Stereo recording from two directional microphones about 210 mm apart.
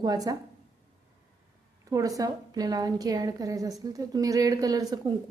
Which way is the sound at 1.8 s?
15° right (ahead or behind).